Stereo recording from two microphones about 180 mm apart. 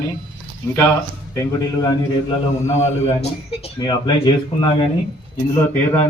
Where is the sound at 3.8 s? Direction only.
25° left (ahead or behind).